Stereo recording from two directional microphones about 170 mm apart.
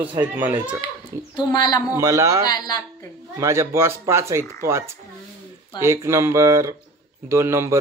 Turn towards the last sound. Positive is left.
turn(degrees=-15)  # may be behind; listen again after turning